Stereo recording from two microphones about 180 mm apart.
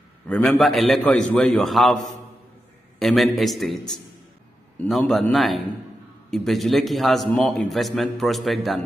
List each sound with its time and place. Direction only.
0.3 s a man's voice: 5° left (ahead or behind)
3.0 s a man's voice: centre (ahead or behind)